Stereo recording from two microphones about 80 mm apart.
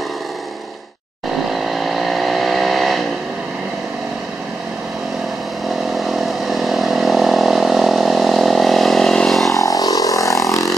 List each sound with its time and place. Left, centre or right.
1.5 s vehicle: centre
5.9 s vehicle: centre
9.6 s vehicle: left